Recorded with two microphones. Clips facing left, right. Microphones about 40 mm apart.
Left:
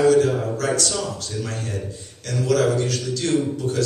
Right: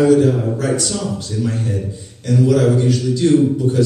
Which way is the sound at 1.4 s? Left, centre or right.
Centre.